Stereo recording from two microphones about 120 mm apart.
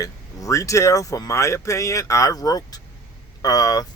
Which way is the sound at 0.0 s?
25° left (ahead or behind).